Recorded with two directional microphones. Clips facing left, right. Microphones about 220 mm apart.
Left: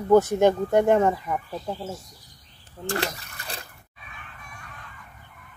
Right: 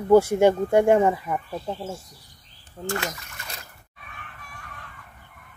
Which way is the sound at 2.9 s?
35° left (ahead or behind).